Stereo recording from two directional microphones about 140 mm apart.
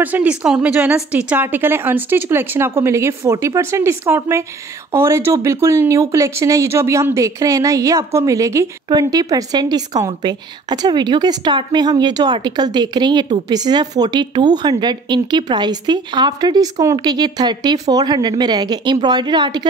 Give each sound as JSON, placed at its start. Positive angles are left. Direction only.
{"t": 0.0, "sound": "a woman's voice", "side_deg": -10}